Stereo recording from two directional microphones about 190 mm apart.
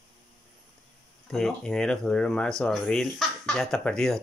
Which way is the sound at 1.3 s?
Centre (ahead or behind).